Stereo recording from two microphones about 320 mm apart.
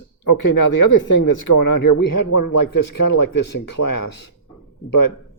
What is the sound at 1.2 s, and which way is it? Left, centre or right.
Speech, left.